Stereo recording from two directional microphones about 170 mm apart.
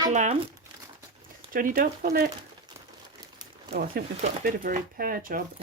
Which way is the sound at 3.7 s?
65° right (ahead or behind).